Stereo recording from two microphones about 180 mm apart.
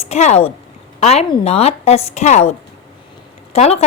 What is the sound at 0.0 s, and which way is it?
A woman's voice, 40° left (ahead or behind).